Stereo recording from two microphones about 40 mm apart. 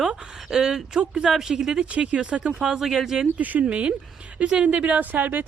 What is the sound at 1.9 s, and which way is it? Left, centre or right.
Speech, right.